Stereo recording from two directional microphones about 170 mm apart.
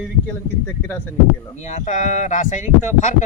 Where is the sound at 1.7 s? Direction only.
45° left (ahead or behind).